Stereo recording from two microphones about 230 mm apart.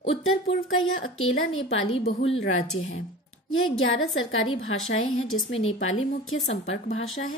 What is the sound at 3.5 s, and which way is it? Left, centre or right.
A woman's voice, left.